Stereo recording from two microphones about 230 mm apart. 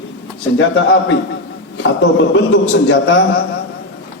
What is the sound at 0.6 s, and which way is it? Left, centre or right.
A man's voice, left.